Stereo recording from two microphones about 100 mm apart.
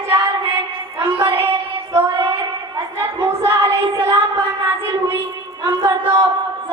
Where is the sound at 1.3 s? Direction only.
25° right (ahead or behind).